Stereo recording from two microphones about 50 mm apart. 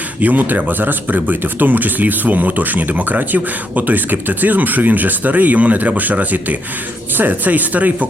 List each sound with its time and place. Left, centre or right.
0.2 s speech: right